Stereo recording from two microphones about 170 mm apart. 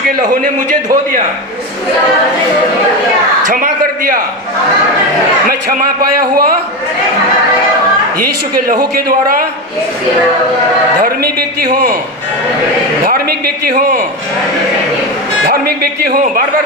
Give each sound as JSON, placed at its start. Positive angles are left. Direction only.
{"t": 3.4, "sound": "a sound", "side_deg": -50}
{"t": 5.5, "sound": "a man's voice", "side_deg": -60}
{"t": 8.5, "sound": "a man's voice", "side_deg": -60}
{"t": 11.0, "sound": "a man's voice", "side_deg": -65}
{"t": 13.1, "sound": "a man's voice", "side_deg": -60}
{"t": 15.4, "sound": "a man's voice", "side_deg": -60}